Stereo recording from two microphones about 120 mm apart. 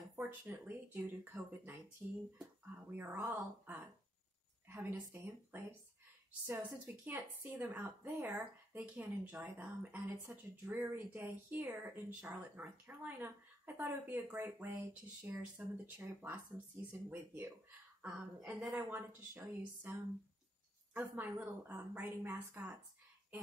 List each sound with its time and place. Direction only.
0.1 s a woman's voice: 15° right (ahead or behind)
18.8 s speech: 15° right (ahead or behind)
21.0 s speech: 15° right (ahead or behind)